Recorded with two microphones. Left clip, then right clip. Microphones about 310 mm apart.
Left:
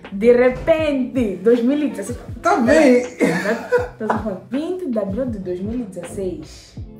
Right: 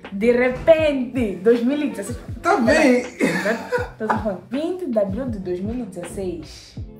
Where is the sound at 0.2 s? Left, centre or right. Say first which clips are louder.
Left 4 dB; centre.